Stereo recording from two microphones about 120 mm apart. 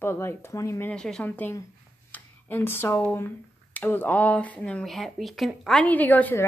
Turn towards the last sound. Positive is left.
turn(degrees=15)  # may be behind; listen again after turning